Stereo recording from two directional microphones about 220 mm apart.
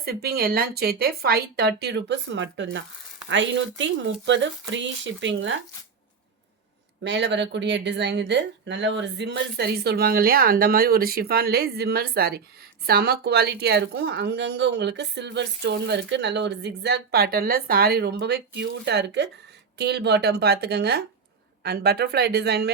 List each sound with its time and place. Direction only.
0.0 s a woman's voice: 45° right (ahead or behind)
7.0 s a woman's voice: 50° right (ahead or behind)